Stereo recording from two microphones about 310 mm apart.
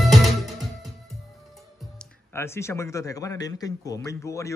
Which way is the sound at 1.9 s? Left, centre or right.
Centre.